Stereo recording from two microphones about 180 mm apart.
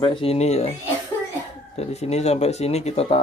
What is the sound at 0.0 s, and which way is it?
Speech, 30° left (ahead or behind).